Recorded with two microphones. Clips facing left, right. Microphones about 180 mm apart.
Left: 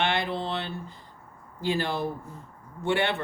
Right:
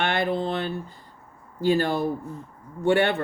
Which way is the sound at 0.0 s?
50° right (ahead or behind).